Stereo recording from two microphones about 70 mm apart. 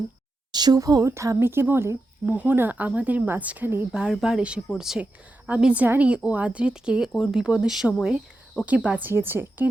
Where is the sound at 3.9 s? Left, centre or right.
Centre.